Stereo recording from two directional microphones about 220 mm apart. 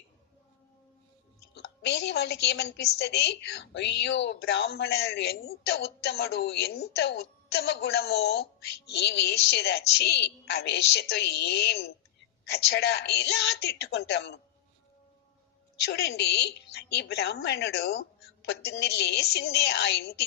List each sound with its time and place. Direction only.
1.5 s a woman's voice: 50° left (ahead or behind)
15.9 s a woman's voice: 45° left (ahead or behind)